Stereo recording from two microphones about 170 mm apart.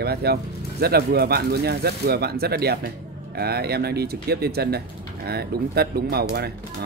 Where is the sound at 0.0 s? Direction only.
70° right (ahead or behind).